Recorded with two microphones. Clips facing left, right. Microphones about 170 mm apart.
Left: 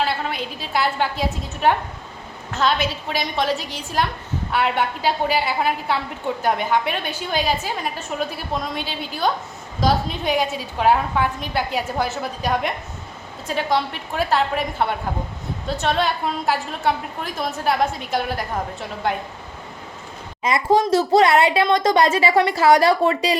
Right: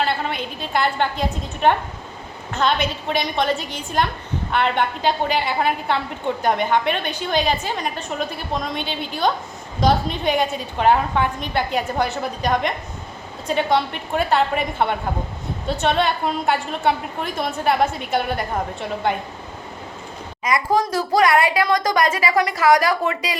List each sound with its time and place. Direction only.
0.0 s a woman's voice: centre (ahead or behind)
20.4 s speech: 25° left (ahead or behind)